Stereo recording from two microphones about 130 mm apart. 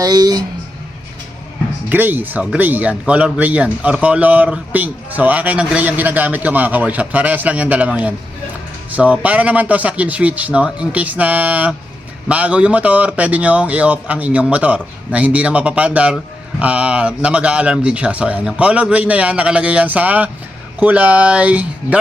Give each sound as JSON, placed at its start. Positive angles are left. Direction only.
{"t": 0.0, "sound": "speech", "side_deg": -30}
{"t": 1.9, "sound": "speech", "side_deg": -15}